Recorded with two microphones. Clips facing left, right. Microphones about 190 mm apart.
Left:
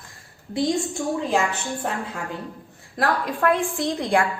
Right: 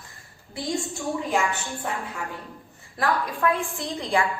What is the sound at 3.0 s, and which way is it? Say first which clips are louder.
A woman's voice: left 2 dB; 75° left (ahead or behind).